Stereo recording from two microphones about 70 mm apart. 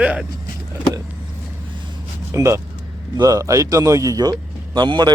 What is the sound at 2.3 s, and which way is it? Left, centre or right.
Speech, right.